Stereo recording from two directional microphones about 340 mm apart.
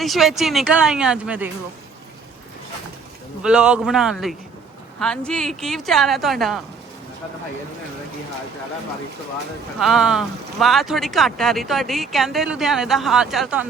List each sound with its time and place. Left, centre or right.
0.0 s speech: centre
3.4 s speech: centre
9.8 s speech: centre